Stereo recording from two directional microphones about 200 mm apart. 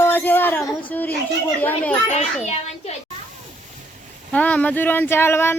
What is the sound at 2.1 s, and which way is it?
Speech, 35° left (ahead or behind).